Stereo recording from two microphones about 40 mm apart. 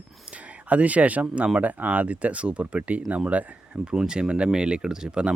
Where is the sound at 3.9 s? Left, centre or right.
Centre.